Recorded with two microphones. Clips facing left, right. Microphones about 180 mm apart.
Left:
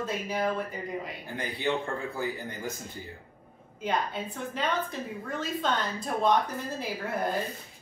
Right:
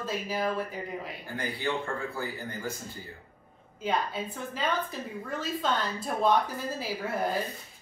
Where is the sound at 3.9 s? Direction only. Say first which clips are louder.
Even; centre (ahead or behind).